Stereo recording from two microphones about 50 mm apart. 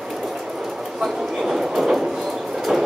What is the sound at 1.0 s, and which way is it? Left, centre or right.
Train, centre.